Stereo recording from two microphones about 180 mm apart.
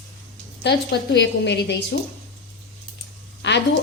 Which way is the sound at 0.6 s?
75° left (ahead or behind).